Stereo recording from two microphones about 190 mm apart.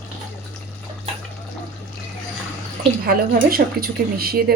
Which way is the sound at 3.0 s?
50° right (ahead or behind).